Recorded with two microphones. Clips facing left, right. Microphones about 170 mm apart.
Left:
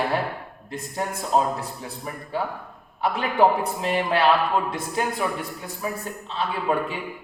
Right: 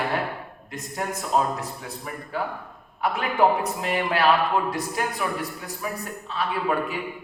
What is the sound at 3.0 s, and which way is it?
A man's voice, 30° left (ahead or behind).